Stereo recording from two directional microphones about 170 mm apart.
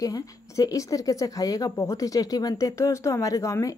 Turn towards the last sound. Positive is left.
turn(degrees=15)  # may be behind; listen again after turning